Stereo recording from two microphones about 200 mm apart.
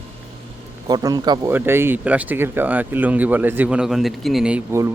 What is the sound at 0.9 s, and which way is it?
Speech, 20° right (ahead or behind).